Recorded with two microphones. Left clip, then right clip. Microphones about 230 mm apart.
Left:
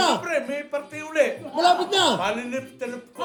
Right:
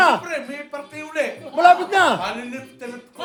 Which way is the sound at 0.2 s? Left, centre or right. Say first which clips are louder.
Left 2 dB; centre.